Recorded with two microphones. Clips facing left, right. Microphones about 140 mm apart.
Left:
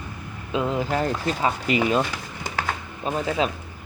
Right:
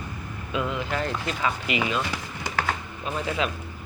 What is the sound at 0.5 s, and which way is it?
Speech, 35° left (ahead or behind).